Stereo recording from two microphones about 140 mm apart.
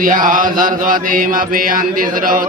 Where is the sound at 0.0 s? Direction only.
75° right (ahead or behind).